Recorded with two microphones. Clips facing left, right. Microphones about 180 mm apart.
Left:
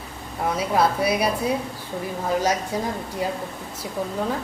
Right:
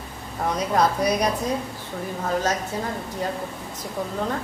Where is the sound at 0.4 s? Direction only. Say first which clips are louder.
Even; 5° left (ahead or behind).